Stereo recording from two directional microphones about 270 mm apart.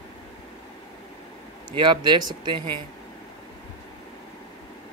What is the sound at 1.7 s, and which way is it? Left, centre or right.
Speech, centre.